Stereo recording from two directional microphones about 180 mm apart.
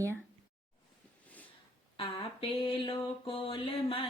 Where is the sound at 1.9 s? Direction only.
30° left (ahead or behind).